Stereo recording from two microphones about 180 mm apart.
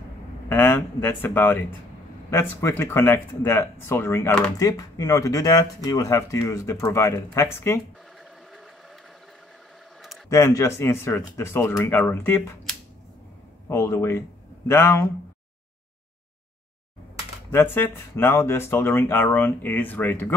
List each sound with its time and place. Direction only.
0.5 s speech: 10° left (ahead or behind)
8.2 s sewing machine: centre (ahead or behind)
10.3 s speech: 15° left (ahead or behind)
13.7 s speech: 15° left (ahead or behind)
17.5 s speech: 10° left (ahead or behind)